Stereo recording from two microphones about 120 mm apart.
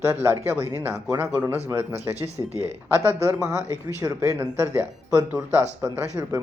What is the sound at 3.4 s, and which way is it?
Speech, 25° right (ahead or behind).